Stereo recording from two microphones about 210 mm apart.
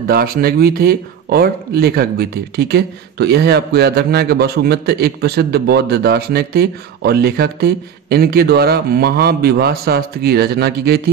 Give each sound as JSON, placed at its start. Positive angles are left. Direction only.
{"t": 0.0, "sound": "speech", "side_deg": -45}